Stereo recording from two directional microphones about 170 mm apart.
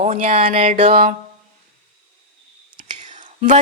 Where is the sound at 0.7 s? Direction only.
35° right (ahead or behind).